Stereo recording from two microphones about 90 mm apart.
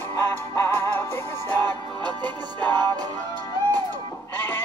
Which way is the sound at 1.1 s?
20° left (ahead or behind).